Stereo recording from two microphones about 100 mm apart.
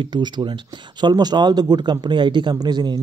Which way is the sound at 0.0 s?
50° right (ahead or behind).